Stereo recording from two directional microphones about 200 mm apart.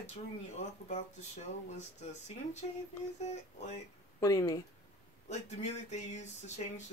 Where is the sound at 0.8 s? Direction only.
35° left (ahead or behind).